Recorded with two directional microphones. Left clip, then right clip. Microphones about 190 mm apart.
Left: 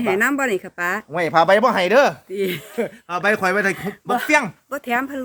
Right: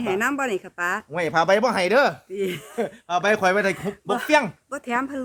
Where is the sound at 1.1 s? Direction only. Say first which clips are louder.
Left 5 dB; 10° right (ahead or behind).